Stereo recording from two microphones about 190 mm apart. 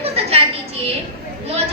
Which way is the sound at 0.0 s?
30° right (ahead or behind).